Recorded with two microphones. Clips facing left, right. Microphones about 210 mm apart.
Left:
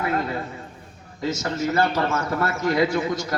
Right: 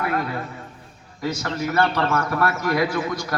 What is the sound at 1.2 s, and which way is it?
A man's voice, 25° left (ahead or behind).